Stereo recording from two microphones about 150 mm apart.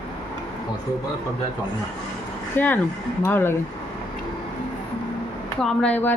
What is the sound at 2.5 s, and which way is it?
A woman's voice, 15° left (ahead or behind).